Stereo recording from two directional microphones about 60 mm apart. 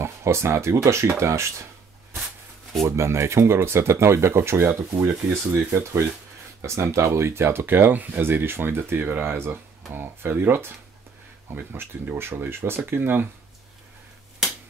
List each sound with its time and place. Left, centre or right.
0.0 s speech: right
3.0 s speech: right
6.6 s speech: right